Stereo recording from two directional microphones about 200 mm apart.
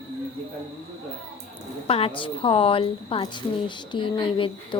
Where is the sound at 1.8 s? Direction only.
30° left (ahead or behind).